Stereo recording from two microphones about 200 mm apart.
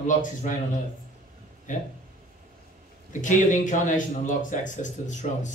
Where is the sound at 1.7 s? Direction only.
40° left (ahead or behind).